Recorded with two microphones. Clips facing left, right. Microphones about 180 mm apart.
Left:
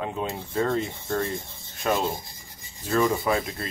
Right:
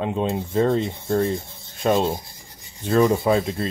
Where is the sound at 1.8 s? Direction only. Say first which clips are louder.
Right 5 dB; 25° right (ahead or behind).